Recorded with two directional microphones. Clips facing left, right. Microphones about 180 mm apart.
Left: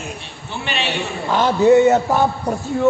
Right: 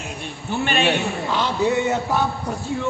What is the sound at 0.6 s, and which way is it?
Speech, 50° right (ahead or behind).